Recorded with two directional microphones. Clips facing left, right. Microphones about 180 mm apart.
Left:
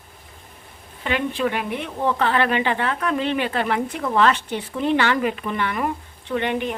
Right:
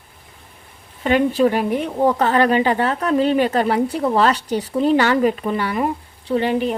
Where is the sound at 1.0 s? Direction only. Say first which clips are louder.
Right 7 dB; 40° right (ahead or behind).